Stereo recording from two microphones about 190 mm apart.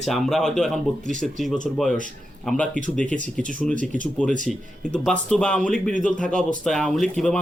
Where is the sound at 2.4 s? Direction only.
5° left (ahead or behind).